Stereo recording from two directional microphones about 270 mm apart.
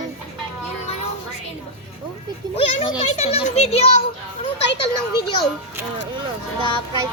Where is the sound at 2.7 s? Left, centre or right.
Left.